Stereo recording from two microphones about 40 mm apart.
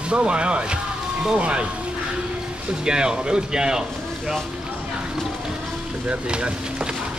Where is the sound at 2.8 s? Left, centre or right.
Centre.